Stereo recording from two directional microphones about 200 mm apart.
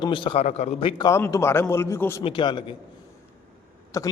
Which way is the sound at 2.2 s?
25° left (ahead or behind).